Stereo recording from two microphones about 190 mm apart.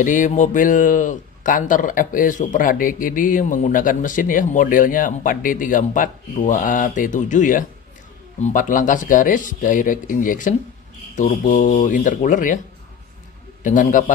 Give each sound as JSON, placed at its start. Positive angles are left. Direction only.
{"t": 0.0, "sound": "speech", "side_deg": 40}
{"t": 13.6, "sound": "a man's voice", "side_deg": 45}